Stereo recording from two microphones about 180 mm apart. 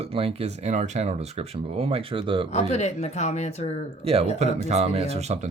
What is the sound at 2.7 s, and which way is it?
Speech, 40° left (ahead or behind).